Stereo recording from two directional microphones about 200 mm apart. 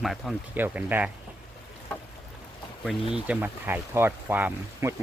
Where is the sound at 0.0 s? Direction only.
Centre (ahead or behind).